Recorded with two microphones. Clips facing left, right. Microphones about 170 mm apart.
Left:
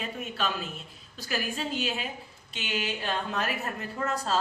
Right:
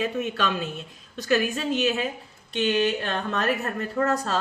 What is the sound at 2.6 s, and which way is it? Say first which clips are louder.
Speech: right 10 dB; 65° right (ahead or behind).